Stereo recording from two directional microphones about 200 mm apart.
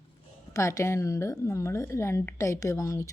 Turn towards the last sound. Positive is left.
turn(degrees=15)  # may be behind; listen again after turning